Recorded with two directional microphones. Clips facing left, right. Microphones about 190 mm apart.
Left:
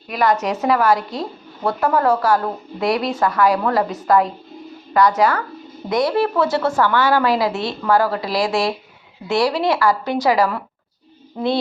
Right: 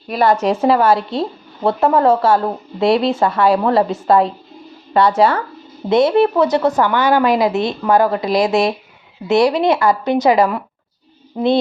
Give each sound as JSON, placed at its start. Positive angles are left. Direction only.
{"t": 0.1, "sound": "speech", "side_deg": -30}